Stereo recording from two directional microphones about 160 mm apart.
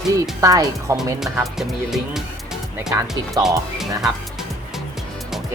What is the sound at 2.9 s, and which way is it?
Speech, 20° right (ahead or behind).